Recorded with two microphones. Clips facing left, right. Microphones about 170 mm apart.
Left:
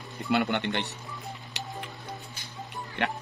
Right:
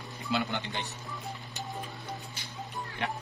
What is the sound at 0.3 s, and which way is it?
Speech, 65° left (ahead or behind).